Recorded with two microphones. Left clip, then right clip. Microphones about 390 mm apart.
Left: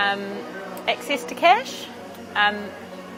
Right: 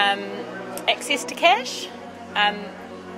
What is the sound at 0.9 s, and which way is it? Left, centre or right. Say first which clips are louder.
A woman's voice: right 2 dB; left.